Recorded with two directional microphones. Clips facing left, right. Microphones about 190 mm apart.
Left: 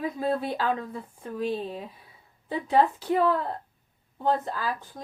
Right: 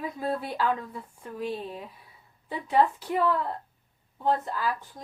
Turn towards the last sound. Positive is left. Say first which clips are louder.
# right 1 dB
turn(degrees=35)  # may be behind; listen again after turning